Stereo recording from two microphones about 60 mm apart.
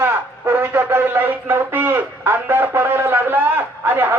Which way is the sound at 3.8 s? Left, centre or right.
Right.